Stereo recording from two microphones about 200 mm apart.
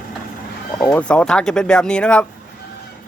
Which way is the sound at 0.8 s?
5° left (ahead or behind).